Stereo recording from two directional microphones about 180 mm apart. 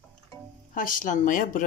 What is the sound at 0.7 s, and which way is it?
Speech, 45° left (ahead or behind).